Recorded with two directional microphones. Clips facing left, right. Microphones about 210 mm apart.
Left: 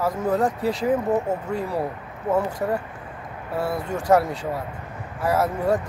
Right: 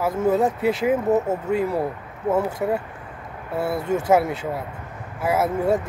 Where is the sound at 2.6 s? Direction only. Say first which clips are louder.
Right 2 dB; 10° right (ahead or behind).